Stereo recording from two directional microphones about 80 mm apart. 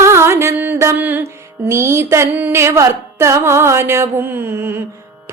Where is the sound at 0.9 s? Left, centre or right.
Right.